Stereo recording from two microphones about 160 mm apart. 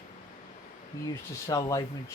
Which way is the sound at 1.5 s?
20° left (ahead or behind).